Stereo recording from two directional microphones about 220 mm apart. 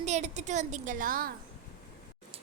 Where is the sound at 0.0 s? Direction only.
30° right (ahead or behind).